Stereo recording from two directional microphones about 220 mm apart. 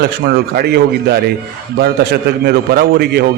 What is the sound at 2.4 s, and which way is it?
Speech, 45° right (ahead or behind).